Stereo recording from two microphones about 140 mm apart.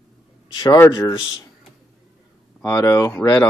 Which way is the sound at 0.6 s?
25° left (ahead or behind).